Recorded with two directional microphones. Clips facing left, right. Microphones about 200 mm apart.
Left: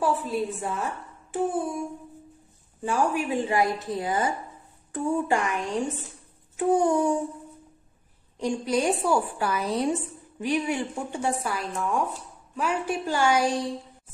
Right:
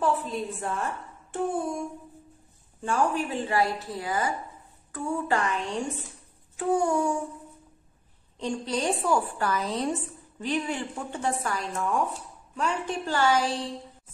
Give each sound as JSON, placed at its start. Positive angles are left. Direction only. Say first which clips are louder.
{"t": 0.0, "sound": "a woman's voice", "louder": "left 2 dB", "side_deg": 5}
{"t": 2.8, "sound": "a child's voice", "louder": "left 1 dB", "side_deg": 10}
{"t": 8.4, "sound": "speech", "louder": "left 4 dB", "side_deg": 10}